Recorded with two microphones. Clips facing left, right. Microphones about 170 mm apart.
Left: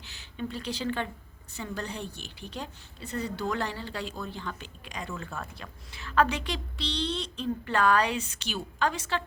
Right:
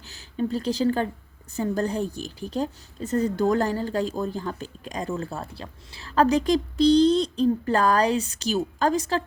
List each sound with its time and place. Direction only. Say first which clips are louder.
0.0 s a woman's voice: right 8 dB; 40° right (ahead or behind)